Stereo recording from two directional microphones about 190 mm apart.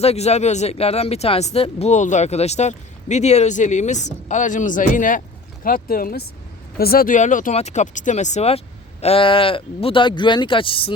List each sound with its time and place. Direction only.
0.0 s speech: 35° left (ahead or behind)